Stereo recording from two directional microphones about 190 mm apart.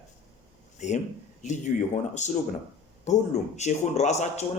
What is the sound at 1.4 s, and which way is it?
Speech, 40° left (ahead or behind).